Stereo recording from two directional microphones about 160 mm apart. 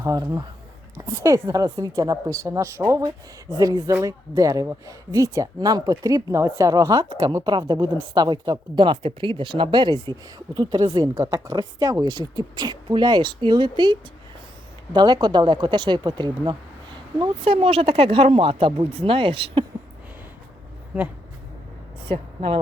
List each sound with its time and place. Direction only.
0.0 s speech: 20° right (ahead or behind)
22.1 s speech: 35° right (ahead or behind)